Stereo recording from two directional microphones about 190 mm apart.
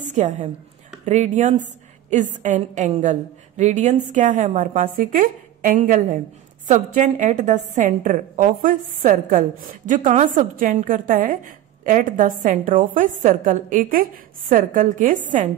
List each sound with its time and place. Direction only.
0.0 s a woman's voice: 40° right (ahead or behind)